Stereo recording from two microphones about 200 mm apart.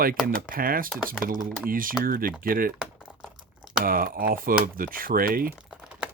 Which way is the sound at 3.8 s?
45° right (ahead or behind).